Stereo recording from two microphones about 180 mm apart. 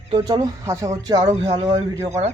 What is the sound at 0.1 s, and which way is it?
Speech, 25° right (ahead or behind).